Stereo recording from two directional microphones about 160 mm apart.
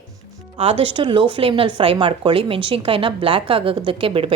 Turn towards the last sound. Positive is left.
turn(degrees=-35)  # may be behind; listen again after turning